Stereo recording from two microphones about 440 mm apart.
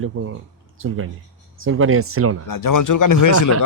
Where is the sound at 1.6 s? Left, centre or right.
Right.